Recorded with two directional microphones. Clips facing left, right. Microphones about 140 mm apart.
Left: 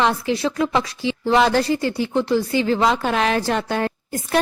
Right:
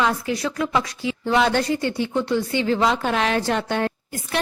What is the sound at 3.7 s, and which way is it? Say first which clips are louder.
Speech: left 1 dB; 40° left (ahead or behind).